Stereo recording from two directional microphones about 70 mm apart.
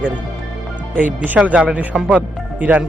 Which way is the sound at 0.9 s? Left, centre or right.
Right.